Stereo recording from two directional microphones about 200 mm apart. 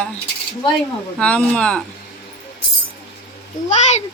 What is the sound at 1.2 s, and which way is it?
Speech, 5° left (ahead or behind).